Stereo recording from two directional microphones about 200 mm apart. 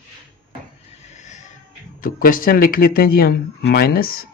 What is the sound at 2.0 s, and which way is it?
Speech, 45° left (ahead or behind).